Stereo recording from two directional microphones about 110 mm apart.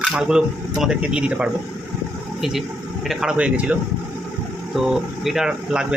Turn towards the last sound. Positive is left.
turn(degrees=-5)  # may be behind; listen again after turning